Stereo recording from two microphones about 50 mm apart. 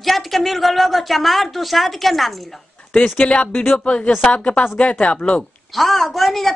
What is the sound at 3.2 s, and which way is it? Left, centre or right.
Speech, left.